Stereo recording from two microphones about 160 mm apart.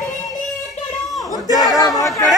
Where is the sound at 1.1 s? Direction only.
25° left (ahead or behind).